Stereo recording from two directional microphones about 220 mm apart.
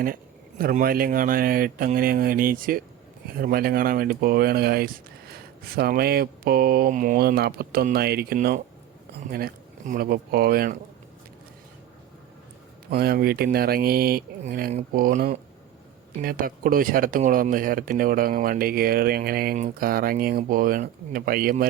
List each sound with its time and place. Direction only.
0.6 s speech: 40° right (ahead or behind)
12.9 s speech: 45° right (ahead or behind)